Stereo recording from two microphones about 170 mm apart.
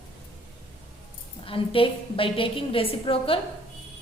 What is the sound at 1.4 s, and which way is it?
A woman's voice, 30° left (ahead or behind).